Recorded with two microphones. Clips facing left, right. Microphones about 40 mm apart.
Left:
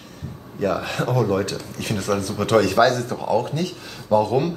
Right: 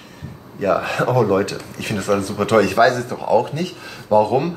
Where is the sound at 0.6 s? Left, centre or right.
Centre.